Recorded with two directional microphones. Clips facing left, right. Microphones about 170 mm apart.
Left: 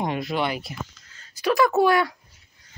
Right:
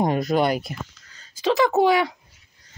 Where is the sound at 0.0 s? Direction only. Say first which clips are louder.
Right 5 dB; 40° right (ahead or behind).